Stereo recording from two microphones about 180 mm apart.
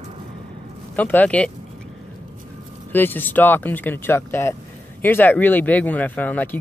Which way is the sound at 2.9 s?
10° left (ahead or behind).